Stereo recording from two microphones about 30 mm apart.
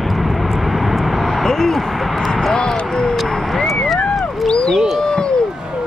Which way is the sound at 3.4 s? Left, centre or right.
Centre.